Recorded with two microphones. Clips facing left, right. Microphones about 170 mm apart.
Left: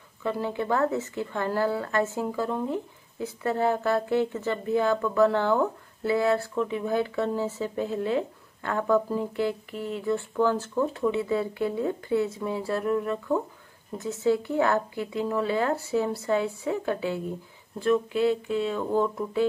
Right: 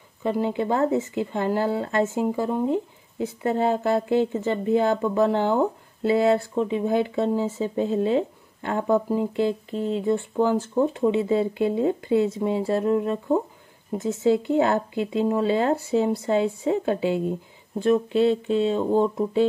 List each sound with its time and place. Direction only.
0.2 s speech: 20° right (ahead or behind)